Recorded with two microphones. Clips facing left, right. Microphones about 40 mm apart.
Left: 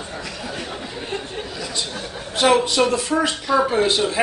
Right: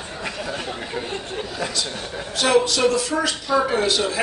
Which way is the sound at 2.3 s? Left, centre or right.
Left.